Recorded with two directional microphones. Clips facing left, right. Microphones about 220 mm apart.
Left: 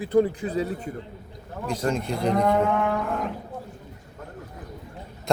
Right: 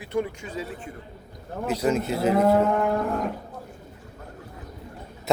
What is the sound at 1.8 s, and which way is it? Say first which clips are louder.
Speech: right 2 dB; 5° right (ahead or behind).